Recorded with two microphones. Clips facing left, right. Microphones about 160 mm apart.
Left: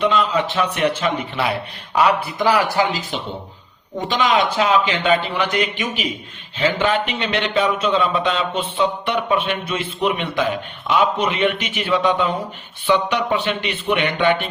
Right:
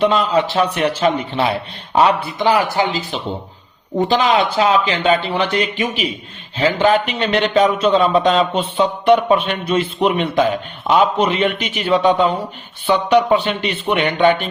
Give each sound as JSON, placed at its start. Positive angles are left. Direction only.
{"t": 0.0, "sound": "speech", "side_deg": -35}